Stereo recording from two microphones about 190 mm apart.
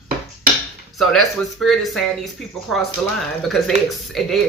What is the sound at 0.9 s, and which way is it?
Speech, centre (ahead or behind).